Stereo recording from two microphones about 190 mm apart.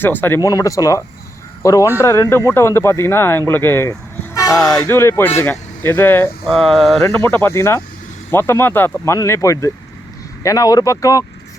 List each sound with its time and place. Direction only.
0.0 s speech: 10° left (ahead or behind)
4.4 s vehicle: 20° left (ahead or behind)
4.8 s speech: 15° left (ahead or behind)